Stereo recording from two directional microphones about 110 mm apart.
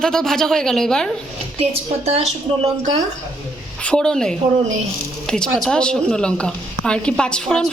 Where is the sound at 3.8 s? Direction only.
10° left (ahead or behind).